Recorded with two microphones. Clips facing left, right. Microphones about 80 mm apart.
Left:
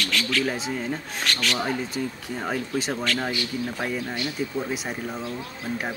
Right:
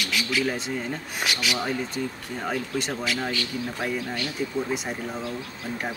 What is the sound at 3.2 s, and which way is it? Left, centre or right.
Speech, centre.